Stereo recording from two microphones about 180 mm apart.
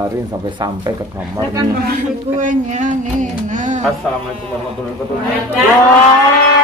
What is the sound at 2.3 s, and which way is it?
Speech, 40° right (ahead or behind).